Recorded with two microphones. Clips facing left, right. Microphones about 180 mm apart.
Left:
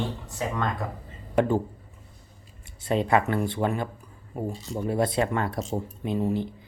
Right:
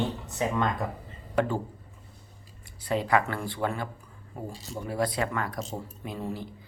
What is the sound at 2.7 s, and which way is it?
Speech, 25° left (ahead or behind).